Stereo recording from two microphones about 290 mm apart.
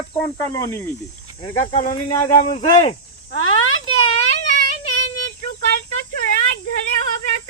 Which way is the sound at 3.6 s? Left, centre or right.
Left.